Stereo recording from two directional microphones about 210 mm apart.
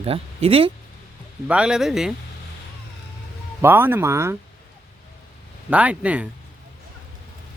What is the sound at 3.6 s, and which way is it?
Speech, 10° right (ahead or behind).